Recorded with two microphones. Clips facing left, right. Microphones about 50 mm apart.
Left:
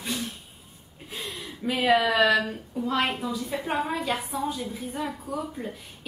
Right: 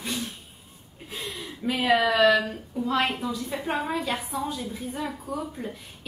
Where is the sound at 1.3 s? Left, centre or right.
Centre.